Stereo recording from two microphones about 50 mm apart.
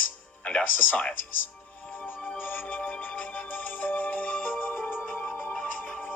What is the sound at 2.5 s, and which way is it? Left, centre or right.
Music, left.